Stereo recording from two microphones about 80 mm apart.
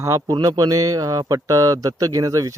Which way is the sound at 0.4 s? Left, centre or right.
Right.